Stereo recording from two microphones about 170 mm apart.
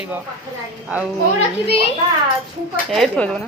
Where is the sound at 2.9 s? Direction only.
Centre (ahead or behind).